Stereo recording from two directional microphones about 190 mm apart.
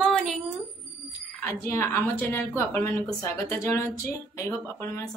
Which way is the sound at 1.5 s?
15° left (ahead or behind).